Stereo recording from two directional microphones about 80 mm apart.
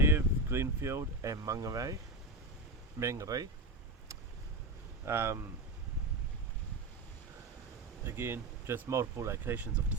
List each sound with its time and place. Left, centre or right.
0.0 s speech: right
3.0 s speech: right
3.2 s speech: right
5.0 s speech: right
8.0 s speech: right
9.4 s speech: right